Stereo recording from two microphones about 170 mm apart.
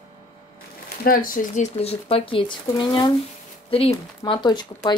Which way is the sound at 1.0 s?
55° left (ahead or behind).